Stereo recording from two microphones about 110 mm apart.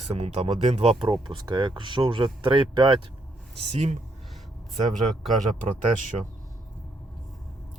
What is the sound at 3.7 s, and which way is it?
Speech, 85° right.